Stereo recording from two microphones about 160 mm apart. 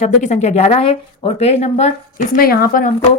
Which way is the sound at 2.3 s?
65° left (ahead or behind).